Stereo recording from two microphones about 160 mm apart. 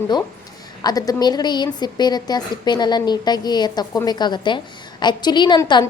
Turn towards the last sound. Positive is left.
turn(degrees=30)  # may be behind; listen again after turning